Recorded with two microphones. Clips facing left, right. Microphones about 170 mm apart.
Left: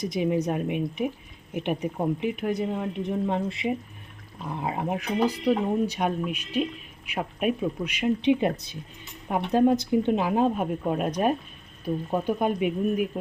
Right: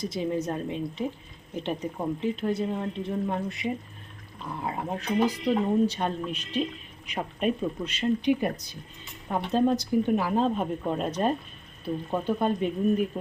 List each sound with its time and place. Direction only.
0.0 s speech: 15° left (ahead or behind)